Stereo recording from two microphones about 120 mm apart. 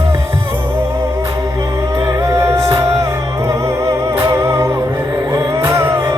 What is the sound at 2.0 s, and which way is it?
Music, 25° right (ahead or behind).